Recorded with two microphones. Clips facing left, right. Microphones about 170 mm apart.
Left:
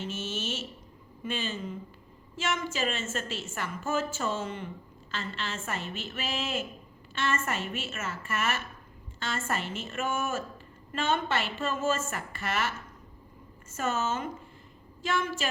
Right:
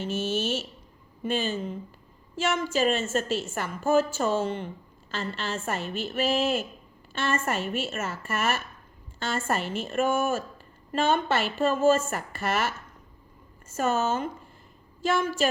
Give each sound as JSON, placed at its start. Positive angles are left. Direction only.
{"t": 0.0, "sound": "a woman's voice", "side_deg": -35}